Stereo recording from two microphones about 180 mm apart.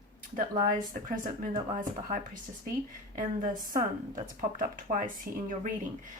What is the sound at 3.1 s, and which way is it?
Speech, 50° right (ahead or behind).